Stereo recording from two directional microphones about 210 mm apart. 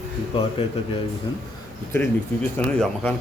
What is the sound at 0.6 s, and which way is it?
Speech, 30° left (ahead or behind).